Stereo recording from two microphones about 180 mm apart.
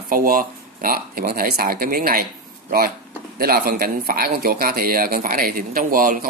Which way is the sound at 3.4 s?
55° right (ahead or behind).